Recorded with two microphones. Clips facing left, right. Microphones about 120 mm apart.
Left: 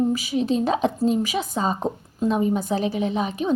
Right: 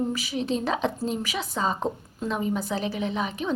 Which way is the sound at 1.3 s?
45° left (ahead or behind).